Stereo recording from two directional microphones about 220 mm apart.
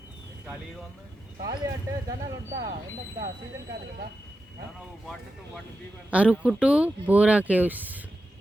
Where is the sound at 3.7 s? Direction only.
45° right (ahead or behind).